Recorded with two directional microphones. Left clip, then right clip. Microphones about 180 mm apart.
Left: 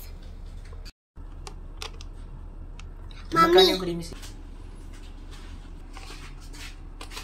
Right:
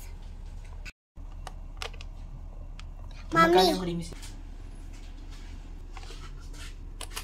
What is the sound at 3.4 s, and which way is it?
Speech, 40° right (ahead or behind).